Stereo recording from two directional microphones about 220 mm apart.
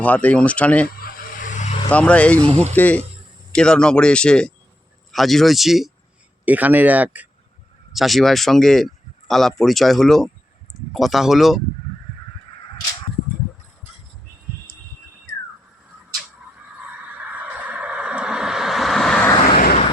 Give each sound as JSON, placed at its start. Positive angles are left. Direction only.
{"t": 0.0, "sound": "speech", "side_deg": 5}
{"t": 0.9, "sound": "vehicle", "side_deg": 40}
{"t": 1.9, "sound": "speech", "side_deg": 5}
{"t": 17.2, "sound": "crow", "side_deg": -5}
{"t": 19.5, "sound": "vehicle", "side_deg": 40}